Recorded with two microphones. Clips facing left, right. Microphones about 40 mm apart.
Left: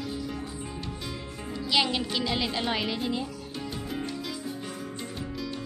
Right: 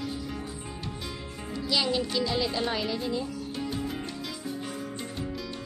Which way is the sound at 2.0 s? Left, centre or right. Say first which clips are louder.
Right 1 dB; centre.